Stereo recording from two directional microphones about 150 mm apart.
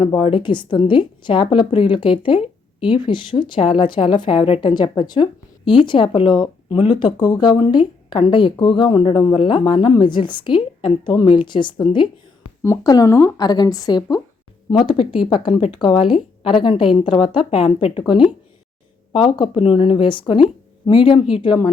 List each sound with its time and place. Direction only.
0.0 s a woman's voice: 35° left (ahead or behind)